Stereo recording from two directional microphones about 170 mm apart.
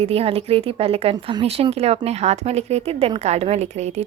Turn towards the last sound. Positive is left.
turn(degrees=-40)  # may be behind; listen again after turning